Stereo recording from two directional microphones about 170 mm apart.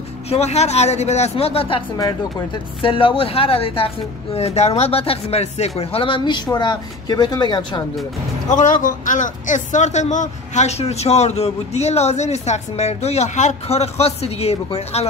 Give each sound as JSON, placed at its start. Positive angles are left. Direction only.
{"t": 0.3, "sound": "speech", "side_deg": 40}
{"t": 2.8, "sound": "speech", "side_deg": 30}
{"t": 8.5, "sound": "speech", "side_deg": 50}